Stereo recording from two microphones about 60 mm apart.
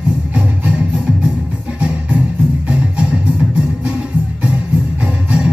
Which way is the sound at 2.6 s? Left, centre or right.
Centre.